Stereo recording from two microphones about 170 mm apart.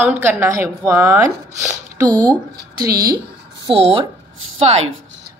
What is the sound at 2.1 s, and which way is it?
Speech, 10° left (ahead or behind).